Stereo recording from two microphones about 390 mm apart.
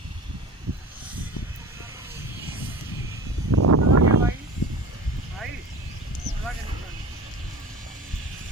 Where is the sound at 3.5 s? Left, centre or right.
Right.